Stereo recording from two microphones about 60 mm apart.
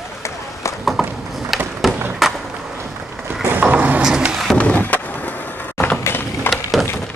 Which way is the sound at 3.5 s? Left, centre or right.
Right.